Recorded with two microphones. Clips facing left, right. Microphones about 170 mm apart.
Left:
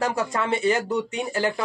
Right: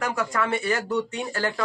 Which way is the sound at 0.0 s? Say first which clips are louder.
Left 1 dB; 25° left (ahead or behind).